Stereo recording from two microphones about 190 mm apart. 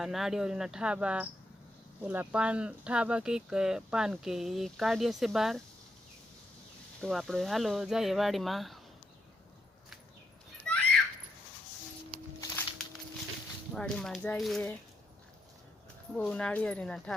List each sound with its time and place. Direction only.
0.0 s speech: centre (ahead or behind)
7.0 s speech: centre (ahead or behind)
10.7 s a sound: 5° left (ahead or behind)
12.4 s a sound: 15° left (ahead or behind)
13.7 s speech: 5° left (ahead or behind)
16.1 s speech: 5° left (ahead or behind)